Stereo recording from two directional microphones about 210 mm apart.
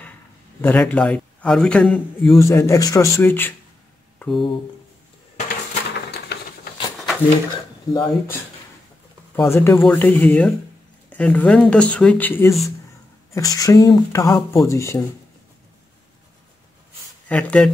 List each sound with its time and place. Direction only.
0.6 s a man's voice: 10° left (ahead or behind)
4.2 s a sound: centre (ahead or behind)
7.9 s a man's voice: 20° left (ahead or behind)
17.3 s speech: 5° left (ahead or behind)